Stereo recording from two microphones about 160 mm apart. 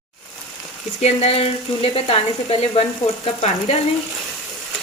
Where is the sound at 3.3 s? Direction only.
50° left (ahead or behind).